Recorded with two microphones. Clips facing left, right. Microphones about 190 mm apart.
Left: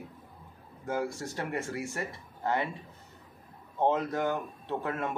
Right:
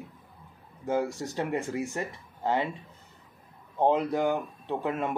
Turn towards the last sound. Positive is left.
turn(degrees=-15)  # may be behind; listen again after turning